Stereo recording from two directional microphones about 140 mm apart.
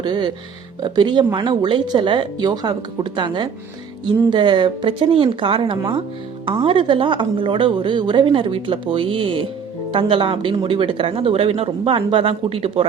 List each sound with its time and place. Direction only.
0.0 s speech: 30° right (ahead or behind)